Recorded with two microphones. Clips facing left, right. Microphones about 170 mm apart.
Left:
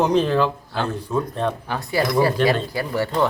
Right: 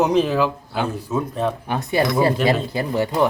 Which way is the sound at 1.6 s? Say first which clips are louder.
Right 2 dB; 20° right (ahead or behind).